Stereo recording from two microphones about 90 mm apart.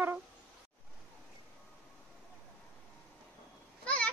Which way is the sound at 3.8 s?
15° left (ahead or behind).